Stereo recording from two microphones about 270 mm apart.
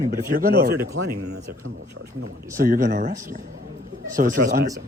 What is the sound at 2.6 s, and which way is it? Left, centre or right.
Speech, right.